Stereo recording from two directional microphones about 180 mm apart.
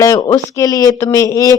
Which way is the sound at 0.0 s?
15° left (ahead or behind).